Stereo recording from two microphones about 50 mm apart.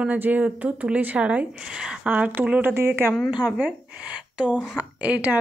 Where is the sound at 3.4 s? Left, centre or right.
Right.